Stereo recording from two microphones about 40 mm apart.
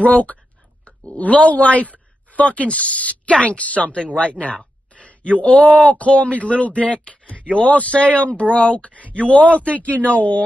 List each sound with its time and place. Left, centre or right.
0.0 s speech: left